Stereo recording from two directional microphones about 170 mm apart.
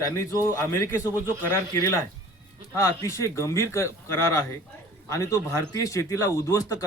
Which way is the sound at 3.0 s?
15° left (ahead or behind).